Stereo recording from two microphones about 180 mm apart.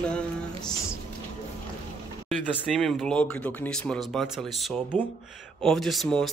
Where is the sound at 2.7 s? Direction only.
Centre (ahead or behind).